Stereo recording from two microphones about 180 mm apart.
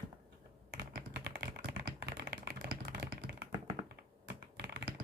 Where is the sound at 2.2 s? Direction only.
60° right (ahead or behind).